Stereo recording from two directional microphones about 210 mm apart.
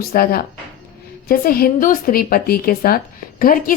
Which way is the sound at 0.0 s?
45° left (ahead or behind).